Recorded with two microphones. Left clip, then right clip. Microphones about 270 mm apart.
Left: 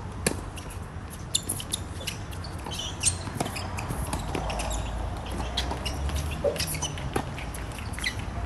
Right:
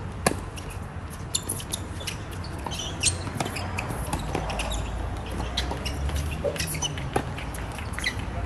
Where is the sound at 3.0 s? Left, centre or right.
Right.